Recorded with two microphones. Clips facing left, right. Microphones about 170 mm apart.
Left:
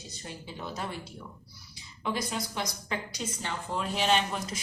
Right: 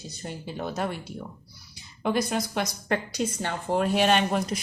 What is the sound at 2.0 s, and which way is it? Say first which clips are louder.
Speech: right 7 dB; 60° right (ahead or behind).